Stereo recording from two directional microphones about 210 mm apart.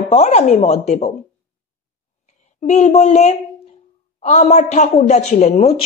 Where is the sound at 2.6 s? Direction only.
35° left (ahead or behind).